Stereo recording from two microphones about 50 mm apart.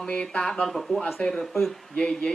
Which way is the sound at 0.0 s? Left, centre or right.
Left.